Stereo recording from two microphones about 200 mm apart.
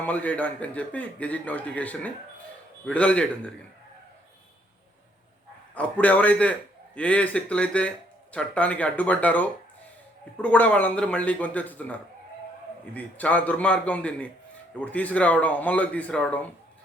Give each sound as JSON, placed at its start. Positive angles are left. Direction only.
{"t": 0.0, "sound": "a man's voice", "side_deg": 5}
{"t": 5.7, "sound": "a man's voice", "side_deg": 5}